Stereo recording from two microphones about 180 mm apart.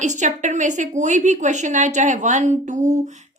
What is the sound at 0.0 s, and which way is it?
A woman's voice, 45° right (ahead or behind).